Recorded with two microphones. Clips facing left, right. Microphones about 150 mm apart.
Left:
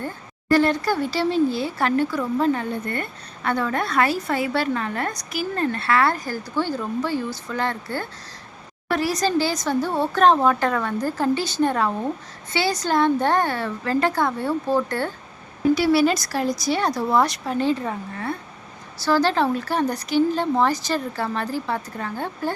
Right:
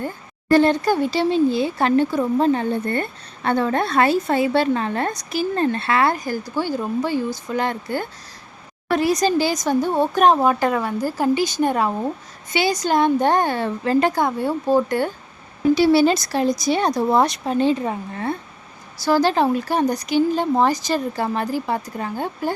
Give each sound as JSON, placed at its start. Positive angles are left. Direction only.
{"t": 0.5, "sound": "speech", "side_deg": -25}
{"t": 15.7, "sound": "speech", "side_deg": -25}